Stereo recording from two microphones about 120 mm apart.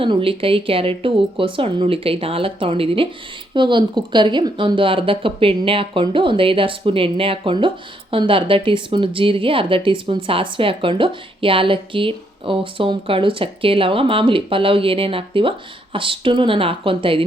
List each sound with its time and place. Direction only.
0.0 s speech: 50° right (ahead or behind)